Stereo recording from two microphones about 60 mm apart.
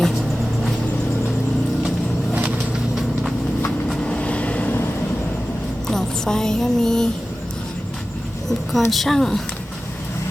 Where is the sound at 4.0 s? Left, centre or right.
Centre.